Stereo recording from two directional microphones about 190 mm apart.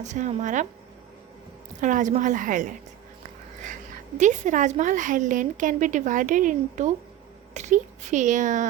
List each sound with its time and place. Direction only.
0.0 s a woman's voice: 40° right (ahead or behind)
1.8 s a woman's voice: 40° right (ahead or behind)
4.2 s a woman's voice: 40° right (ahead or behind)